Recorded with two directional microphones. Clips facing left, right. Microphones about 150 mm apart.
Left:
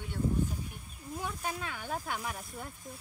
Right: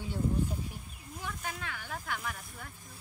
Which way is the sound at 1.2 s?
25° left (ahead or behind).